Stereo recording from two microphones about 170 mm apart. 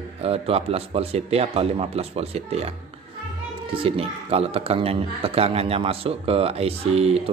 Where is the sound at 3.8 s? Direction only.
35° right (ahead or behind).